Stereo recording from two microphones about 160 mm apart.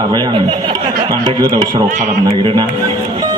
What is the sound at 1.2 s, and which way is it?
Speech, 25° right (ahead or behind).